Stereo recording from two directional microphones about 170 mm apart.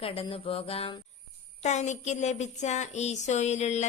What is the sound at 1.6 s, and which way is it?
Speech, 45° left (ahead or behind).